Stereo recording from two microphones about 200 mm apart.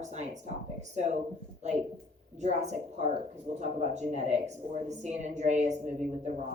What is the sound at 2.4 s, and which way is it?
Speech, 35° right (ahead or behind).